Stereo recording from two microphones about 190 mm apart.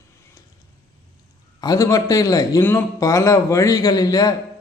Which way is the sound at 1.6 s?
20° left (ahead or behind).